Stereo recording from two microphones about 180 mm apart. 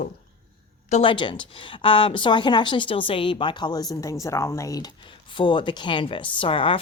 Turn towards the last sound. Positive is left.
turn(degrees=30)  # may be behind; listen again after turning